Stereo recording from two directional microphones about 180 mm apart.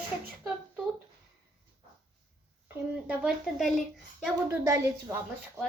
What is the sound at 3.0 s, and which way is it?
A woman's voice, 5° right (ahead or behind).